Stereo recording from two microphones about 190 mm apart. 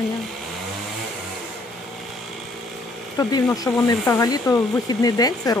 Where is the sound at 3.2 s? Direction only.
20° left (ahead or behind).